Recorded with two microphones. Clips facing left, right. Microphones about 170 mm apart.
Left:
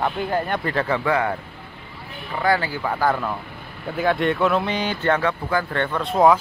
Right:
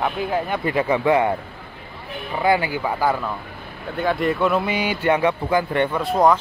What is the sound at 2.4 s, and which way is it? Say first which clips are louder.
Speech: right 2 dB; 15° right (ahead or behind).